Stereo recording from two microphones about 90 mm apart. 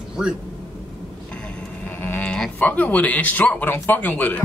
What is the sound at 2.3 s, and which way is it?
Speech, 10° left (ahead or behind).